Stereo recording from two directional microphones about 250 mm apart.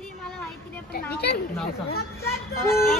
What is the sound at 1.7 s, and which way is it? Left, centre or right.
Speech, left.